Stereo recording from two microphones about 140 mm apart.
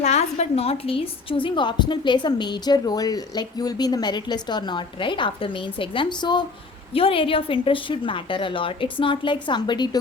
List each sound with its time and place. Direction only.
0.0 s a woman's voice: 55° left (ahead or behind); by 10.0 s 30° left (ahead or behind)